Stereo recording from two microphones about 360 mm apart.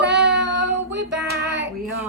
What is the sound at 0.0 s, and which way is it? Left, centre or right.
Child singing, right.